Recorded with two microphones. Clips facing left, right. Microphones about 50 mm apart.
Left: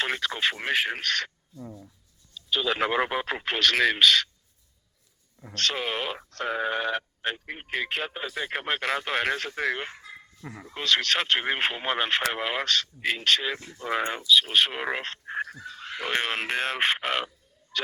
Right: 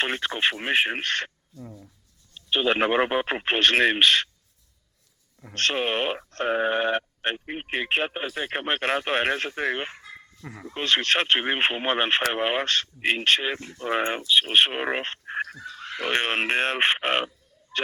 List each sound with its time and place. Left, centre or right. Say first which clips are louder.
0.0 s speech: right 2 dB; right
2.3 s speech: right 4 dB; right
5.5 s speech: right 4 dB; right
10.4 s speech: right 2 dB; centre
10.8 s speech: right 2 dB; right
15.6 s speech: right 3 dB; right